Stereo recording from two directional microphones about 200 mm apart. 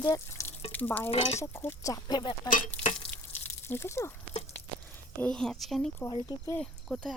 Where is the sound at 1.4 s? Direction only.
10° left (ahead or behind).